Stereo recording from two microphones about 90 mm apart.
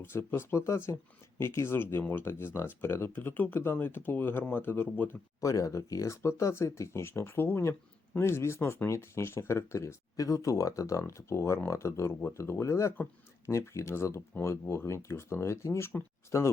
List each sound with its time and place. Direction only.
0.0 s speech: 25° left (ahead or behind)
5.4 s speech: 40° left (ahead or behind)